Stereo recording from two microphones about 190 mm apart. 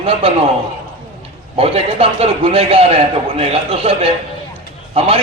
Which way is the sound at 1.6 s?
30° right (ahead or behind).